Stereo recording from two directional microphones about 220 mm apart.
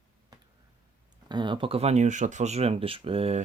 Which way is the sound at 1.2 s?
20° right (ahead or behind).